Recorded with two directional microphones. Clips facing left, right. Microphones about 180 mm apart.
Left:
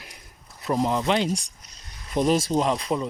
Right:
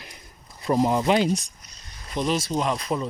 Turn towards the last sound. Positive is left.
turn(degrees=20)  # may be behind; listen again after turning